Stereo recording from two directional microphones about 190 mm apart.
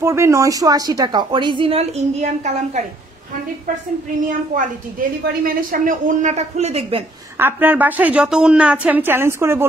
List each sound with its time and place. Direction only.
0.0 s a woman's voice: 15° right (ahead or behind); by 2.8 s 40° right (ahead or behind)
5.4 s speech: 45° right (ahead or behind); by 7.0 s 30° right (ahead or behind)
7.3 s a woman's voice: 10° right (ahead or behind)